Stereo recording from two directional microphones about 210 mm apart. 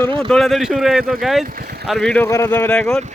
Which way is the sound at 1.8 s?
Centre (ahead or behind).